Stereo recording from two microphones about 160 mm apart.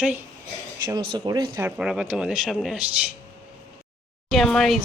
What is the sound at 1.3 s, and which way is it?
Speech, 25° right (ahead or behind).